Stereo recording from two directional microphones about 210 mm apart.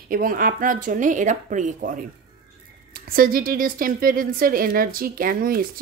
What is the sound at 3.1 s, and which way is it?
A woman's voice, 45° right (ahead or behind).